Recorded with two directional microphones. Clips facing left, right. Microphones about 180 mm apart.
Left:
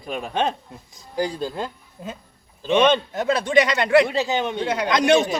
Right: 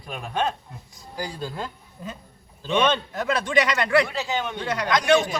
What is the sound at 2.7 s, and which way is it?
A man's voice, 25° left (ahead or behind).